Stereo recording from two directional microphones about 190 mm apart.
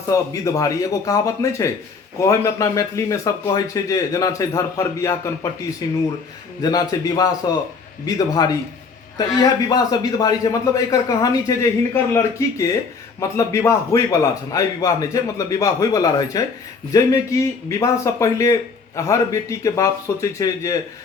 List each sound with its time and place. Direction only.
0.1 s speech: 15° left (ahead or behind)
6.6 s a man's voice: 20° left (ahead or behind)